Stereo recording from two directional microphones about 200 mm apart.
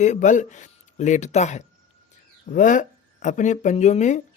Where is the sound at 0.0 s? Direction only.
35° left (ahead or behind).